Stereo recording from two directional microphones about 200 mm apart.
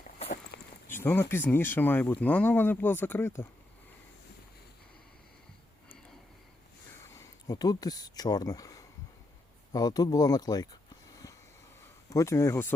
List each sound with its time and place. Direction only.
0.5 s a sound: 55° left (ahead or behind)
0.9 s speech: 10° left (ahead or behind)
7.1 s speech: 15° left (ahead or behind)
12.0 s speech: 15° left (ahead or behind)